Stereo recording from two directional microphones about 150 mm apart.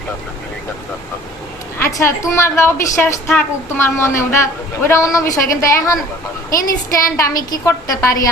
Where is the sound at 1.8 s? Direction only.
20° left (ahead or behind).